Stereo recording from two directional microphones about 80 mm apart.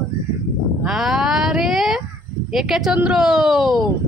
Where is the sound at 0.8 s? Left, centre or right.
Centre.